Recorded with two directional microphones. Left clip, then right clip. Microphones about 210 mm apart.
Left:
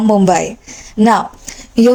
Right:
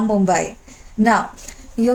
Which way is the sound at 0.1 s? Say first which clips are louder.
Left 7 dB; 35° left (ahead or behind).